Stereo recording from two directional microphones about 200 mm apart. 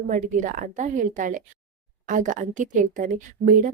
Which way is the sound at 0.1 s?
40° right (ahead or behind).